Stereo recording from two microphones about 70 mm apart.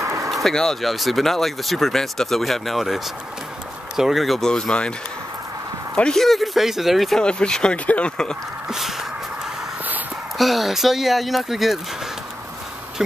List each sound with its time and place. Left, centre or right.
0.0 s a sound: right
0.3 s speech: centre
4.5 s speech: centre
5.9 s speech: centre
7.2 s speech: centre
8.6 s speech: centre
10.3 s speech: centre